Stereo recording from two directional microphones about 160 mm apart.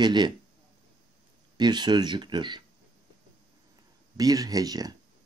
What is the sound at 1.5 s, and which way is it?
Speech, 25° right (ahead or behind).